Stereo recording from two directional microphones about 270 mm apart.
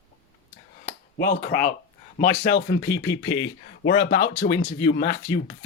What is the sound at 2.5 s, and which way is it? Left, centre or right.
Speech, left.